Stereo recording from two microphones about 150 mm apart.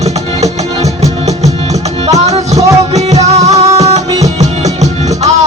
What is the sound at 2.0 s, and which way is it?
Music, 45° right (ahead or behind).